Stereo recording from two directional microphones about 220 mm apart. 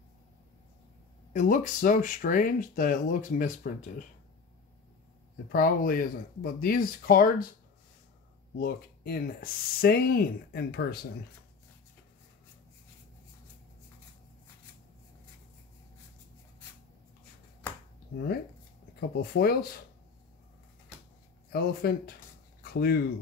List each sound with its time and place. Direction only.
1.3 s speech: 35° left (ahead or behind)
5.5 s speech: 40° left (ahead or behind)
8.5 s speech: 45° left (ahead or behind)
18.9 s speech: 45° left (ahead or behind)
21.5 s speech: 45° left (ahead or behind)
22.6 s a sound: 45° left (ahead or behind)